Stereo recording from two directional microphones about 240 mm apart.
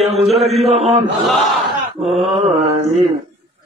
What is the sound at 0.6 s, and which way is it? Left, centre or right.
Speech, right.